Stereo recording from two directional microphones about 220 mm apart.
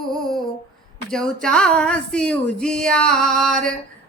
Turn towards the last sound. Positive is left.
turn(degrees=0)  # may be behind; listen again after turning